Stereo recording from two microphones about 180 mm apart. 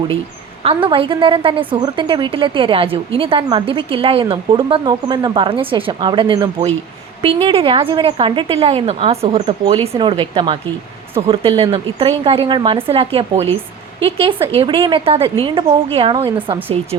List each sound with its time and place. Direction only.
0.6 s a woman's voice: 30° right (ahead or behind)
14.5 s a woman's voice: 30° right (ahead or behind)